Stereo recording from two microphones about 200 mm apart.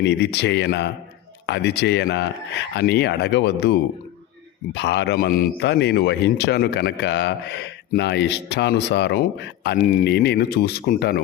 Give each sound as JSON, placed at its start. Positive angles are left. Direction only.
{"t": 0.0, "sound": "a man's voice", "side_deg": 55}